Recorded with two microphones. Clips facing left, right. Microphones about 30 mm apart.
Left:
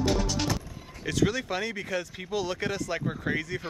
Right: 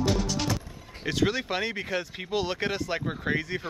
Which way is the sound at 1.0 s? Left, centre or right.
Right.